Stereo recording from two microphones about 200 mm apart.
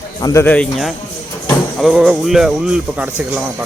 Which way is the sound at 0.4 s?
5° left (ahead or behind).